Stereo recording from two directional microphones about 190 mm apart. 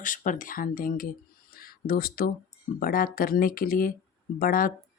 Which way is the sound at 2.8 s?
50° left (ahead or behind).